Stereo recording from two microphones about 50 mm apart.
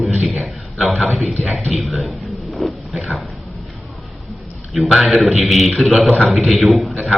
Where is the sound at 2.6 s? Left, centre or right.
Centre.